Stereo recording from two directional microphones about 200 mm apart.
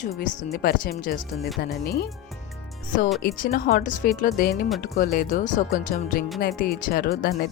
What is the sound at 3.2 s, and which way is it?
Speech, 45° left (ahead or behind).